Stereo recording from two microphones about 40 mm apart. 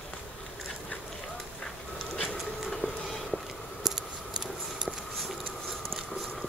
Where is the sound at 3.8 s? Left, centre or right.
Centre.